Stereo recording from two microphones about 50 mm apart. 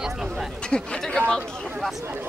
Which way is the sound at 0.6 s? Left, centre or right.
Centre.